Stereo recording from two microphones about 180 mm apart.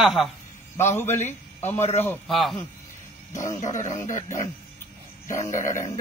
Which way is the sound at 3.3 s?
45° left (ahead or behind).